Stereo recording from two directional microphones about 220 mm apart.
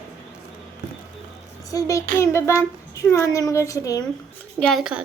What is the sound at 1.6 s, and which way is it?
Speech, 15° left (ahead or behind).